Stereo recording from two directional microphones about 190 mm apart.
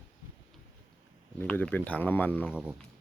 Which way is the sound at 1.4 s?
10° left (ahead or behind).